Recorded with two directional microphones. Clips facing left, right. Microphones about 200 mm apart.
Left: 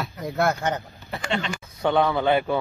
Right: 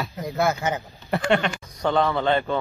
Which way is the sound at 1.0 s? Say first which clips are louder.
Right 7 dB; 60° right (ahead or behind).